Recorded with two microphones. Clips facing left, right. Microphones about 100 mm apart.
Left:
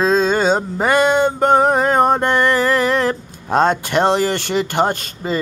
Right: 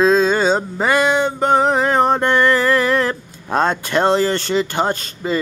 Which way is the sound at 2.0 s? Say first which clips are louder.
Even; 20° left (ahead or behind).